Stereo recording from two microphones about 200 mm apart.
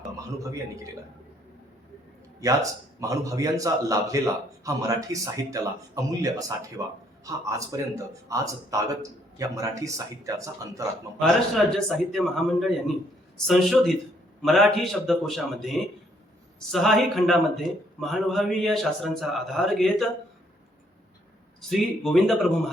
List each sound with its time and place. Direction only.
0.3 s a man's voice: 15° right (ahead or behind)
3.0 s a man's voice: 15° right (ahead or behind)
11.2 s a man's voice: centre (ahead or behind)
21.6 s a man's voice: centre (ahead or behind)